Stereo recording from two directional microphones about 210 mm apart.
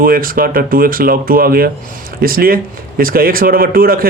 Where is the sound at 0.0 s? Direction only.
45° right (ahead or behind).